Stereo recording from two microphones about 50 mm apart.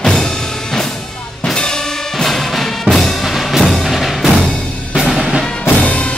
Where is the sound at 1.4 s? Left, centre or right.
Centre.